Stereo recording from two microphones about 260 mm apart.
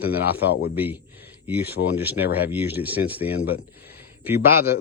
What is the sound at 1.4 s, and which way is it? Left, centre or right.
Speech, centre.